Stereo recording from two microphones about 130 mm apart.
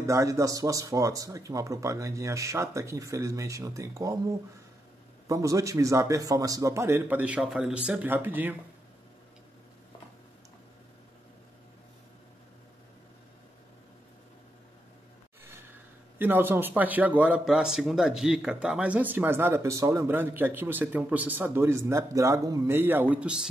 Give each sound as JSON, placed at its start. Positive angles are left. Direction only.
{"t": 0.0, "sound": "speech", "side_deg": -25}
{"t": 5.3, "sound": "speech", "side_deg": -25}
{"t": 16.2, "sound": "speech", "side_deg": -15}